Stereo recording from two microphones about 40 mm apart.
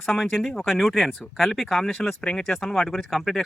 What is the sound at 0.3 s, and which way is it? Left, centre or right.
Speech, centre.